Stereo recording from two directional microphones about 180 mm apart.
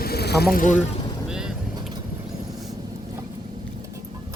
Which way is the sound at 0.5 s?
45° left (ahead or behind).